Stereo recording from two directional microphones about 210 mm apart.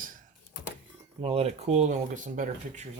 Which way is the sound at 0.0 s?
40° right (ahead or behind).